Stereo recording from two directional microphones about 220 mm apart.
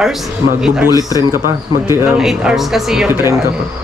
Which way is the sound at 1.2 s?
15° right (ahead or behind).